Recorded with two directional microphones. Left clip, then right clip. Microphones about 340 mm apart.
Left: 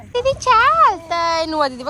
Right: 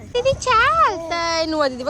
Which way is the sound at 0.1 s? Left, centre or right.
Centre.